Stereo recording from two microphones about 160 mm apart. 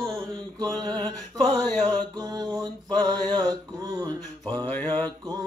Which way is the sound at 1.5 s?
5° left (ahead or behind).